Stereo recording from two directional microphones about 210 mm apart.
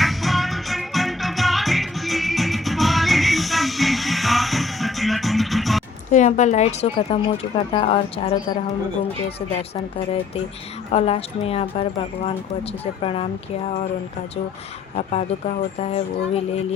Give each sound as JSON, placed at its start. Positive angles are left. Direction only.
{"t": 0.0, "sound": "music", "side_deg": 0}
{"t": 6.1, "sound": "speech", "side_deg": 35}
{"t": 10.9, "sound": "speech", "side_deg": 30}
{"t": 14.9, "sound": "speech", "side_deg": 30}